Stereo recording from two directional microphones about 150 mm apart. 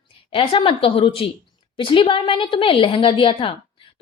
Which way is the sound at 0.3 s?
35° left (ahead or behind).